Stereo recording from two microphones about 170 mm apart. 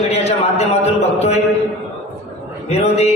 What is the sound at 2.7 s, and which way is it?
Speech, 40° left (ahead or behind).